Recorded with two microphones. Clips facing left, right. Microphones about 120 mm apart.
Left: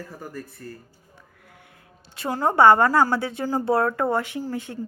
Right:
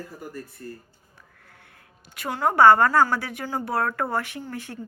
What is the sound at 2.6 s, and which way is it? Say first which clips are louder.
Speech: even; 20° left (ahead or behind).